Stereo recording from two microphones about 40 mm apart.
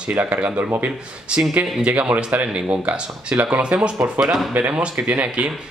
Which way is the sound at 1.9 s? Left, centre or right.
Right.